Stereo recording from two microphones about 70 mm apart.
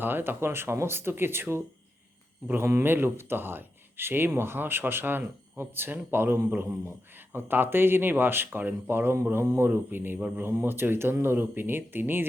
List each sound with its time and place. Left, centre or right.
0.0 s speech: right